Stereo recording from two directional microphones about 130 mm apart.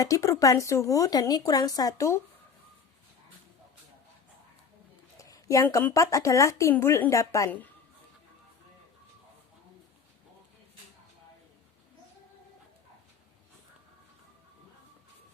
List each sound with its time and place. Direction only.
0.0 s a woman's voice: 25° left (ahead or behind)
5.1 s a sound: 25° left (ahead or behind)
5.8 s a woman's voice: 25° left (ahead or behind)